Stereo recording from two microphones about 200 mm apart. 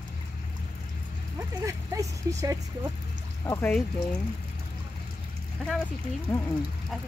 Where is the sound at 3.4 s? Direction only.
10° left (ahead or behind).